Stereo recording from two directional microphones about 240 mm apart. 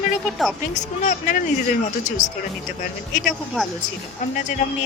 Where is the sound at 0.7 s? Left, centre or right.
Left.